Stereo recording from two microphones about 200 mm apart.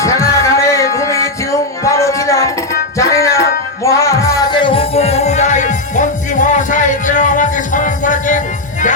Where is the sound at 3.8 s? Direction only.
15° left (ahead or behind).